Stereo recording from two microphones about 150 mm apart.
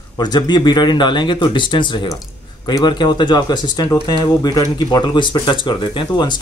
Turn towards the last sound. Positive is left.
turn(degrees=30)  # may be behind; listen again after turning